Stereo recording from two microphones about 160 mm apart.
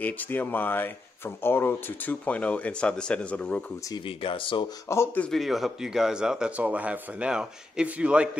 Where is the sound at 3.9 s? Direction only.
30° left (ahead or behind).